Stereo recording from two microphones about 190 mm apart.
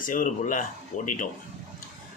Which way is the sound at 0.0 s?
45° left (ahead or behind).